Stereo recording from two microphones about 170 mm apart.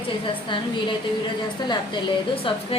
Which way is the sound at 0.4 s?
30° left (ahead or behind).